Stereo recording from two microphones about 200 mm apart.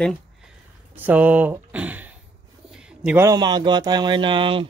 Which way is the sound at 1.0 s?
10° right (ahead or behind).